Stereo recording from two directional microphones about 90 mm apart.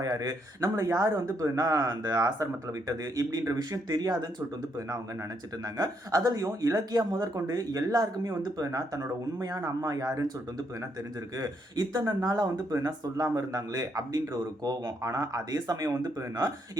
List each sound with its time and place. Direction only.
0.0 s speech: 45° right (ahead or behind)
5.7 s speech: 45° right (ahead or behind)
11.3 s speech: 40° right (ahead or behind)